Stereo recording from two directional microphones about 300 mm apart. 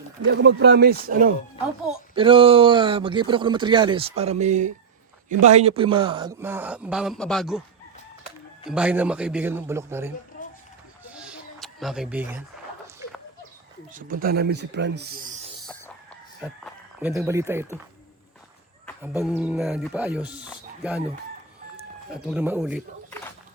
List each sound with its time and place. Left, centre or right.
0.3 s speech: right
2.1 s speech: centre
8.6 s a man's voice: centre
11.2 s a sound: centre
13.9 s speech: right
16.4 s speech: centre
19.0 s a man's voice: centre
22.1 s speech: centre